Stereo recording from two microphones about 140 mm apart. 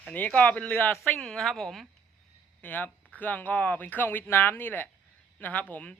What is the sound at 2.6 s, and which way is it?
Speech, 10° left (ahead or behind).